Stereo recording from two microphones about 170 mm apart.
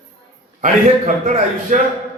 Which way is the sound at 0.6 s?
45° right (ahead or behind).